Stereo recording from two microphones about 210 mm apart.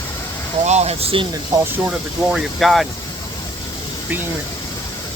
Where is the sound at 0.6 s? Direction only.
30° right (ahead or behind).